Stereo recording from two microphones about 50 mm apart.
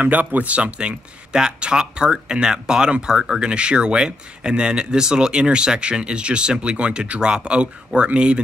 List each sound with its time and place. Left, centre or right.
0.0 s speech: right